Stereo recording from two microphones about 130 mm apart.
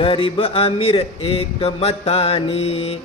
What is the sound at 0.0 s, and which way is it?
Speech, 45° left (ahead or behind).